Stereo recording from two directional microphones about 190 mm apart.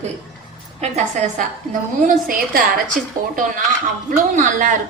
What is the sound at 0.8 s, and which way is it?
Speech, 35° right (ahead or behind).